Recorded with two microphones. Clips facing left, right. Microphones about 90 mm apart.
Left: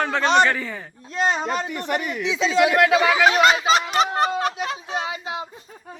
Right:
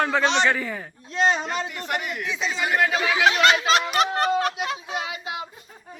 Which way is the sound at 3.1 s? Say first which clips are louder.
Left 3 dB; 40° left (ahead or behind).